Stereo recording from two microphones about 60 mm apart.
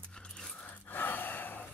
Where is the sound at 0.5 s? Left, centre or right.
Left.